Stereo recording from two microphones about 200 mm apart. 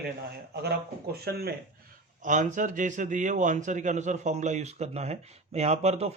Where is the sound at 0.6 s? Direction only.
50° right (ahead or behind).